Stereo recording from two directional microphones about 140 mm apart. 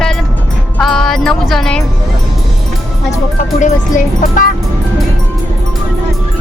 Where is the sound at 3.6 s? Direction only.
70° left (ahead or behind).